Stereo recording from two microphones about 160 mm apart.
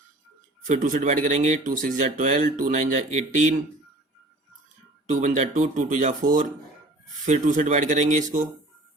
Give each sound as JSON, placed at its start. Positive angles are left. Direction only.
{"t": 0.7, "sound": "speech", "side_deg": -50}
{"t": 5.2, "sound": "speech", "side_deg": -50}